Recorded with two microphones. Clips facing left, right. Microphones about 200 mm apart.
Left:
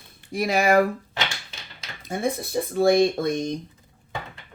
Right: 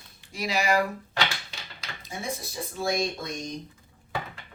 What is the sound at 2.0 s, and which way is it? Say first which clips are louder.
Speech: left 9 dB; 55° left (ahead or behind).